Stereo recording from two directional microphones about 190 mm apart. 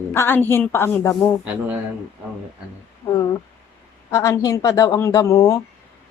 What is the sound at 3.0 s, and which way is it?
A woman's voice, 10° left (ahead or behind).